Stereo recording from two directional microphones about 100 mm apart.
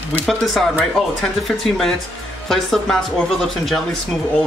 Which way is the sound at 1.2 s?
5° left (ahead or behind).